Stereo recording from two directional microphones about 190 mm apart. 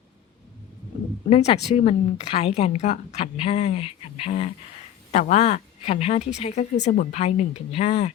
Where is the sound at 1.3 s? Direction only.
30° left (ahead or behind).